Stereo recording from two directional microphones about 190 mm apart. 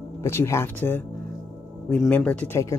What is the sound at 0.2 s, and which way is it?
Speech, 15° left (ahead or behind).